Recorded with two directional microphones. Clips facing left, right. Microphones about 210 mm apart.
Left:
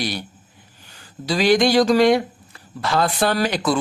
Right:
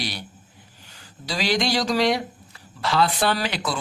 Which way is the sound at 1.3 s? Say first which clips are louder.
Left 7 dB; 50° left (ahead or behind).